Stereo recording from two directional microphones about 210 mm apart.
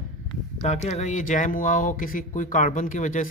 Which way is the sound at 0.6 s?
35° left (ahead or behind).